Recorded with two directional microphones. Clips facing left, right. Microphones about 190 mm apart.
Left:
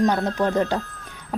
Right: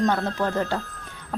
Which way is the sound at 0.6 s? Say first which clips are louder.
Left 4 dB; 15° left (ahead or behind).